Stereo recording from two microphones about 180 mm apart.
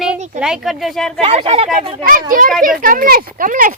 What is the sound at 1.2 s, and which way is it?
Speech, 35° right (ahead or behind).